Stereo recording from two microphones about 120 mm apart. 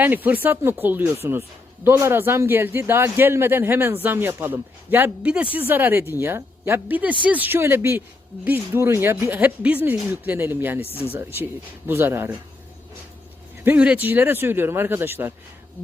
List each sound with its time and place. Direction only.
0.0 s a man's voice: 15° right (ahead or behind)
13.7 s a man's voice: 10° right (ahead or behind)